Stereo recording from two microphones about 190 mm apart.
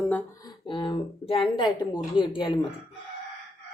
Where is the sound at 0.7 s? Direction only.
25° left (ahead or behind).